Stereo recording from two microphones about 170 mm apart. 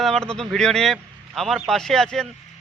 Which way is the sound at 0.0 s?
Centre (ahead or behind).